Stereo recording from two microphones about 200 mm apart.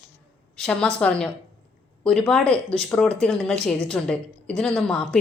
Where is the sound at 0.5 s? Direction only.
5° left (ahead or behind).